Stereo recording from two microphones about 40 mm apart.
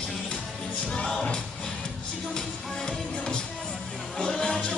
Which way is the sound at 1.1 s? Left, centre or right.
Centre.